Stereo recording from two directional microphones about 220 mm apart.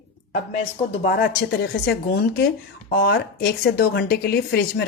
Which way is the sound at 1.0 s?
45° left (ahead or behind).